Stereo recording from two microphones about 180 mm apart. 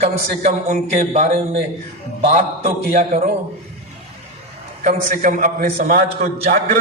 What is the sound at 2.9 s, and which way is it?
Speech, 40° right (ahead or behind).